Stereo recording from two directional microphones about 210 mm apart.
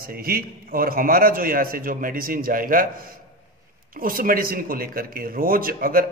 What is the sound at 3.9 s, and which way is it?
Speech, 40° right (ahead or behind).